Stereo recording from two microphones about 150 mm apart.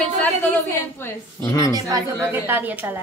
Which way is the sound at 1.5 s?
25° left (ahead or behind).